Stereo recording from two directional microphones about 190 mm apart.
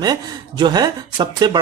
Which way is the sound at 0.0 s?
20° right (ahead or behind).